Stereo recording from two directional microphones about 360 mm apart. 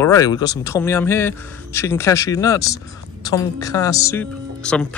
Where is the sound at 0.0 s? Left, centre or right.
Centre.